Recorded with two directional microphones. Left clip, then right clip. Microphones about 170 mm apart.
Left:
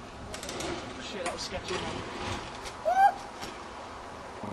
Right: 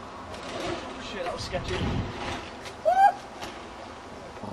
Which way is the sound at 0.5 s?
Centre (ahead or behind).